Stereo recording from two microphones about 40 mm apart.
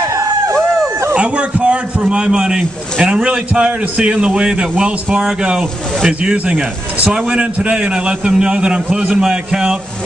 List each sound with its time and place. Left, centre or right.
1.1 s a man's voice: right
6.3 s speech: right
7.2 s a man's voice: right